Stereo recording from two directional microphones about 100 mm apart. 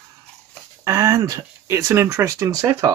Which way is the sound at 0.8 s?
30° right (ahead or behind).